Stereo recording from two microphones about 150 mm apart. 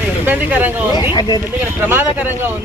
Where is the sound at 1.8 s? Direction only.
15° right (ahead or behind).